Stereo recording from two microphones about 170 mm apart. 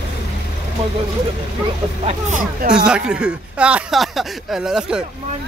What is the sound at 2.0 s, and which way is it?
Speech, 45° right (ahead or behind).